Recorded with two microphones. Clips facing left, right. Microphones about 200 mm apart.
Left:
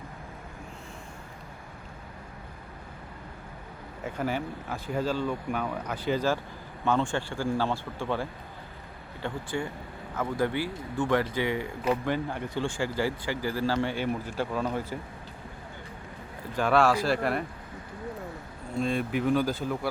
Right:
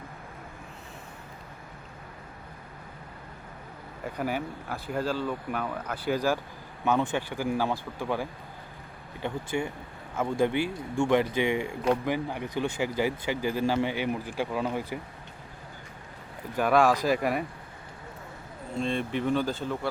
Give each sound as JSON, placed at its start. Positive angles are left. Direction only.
{"t": 4.7, "sound": "speech", "side_deg": -5}
{"t": 16.6, "sound": "speech", "side_deg": -10}
{"t": 18.8, "sound": "speech", "side_deg": 5}